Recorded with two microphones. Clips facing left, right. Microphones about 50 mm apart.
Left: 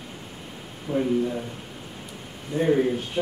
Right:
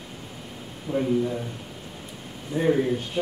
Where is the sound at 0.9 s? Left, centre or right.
Centre.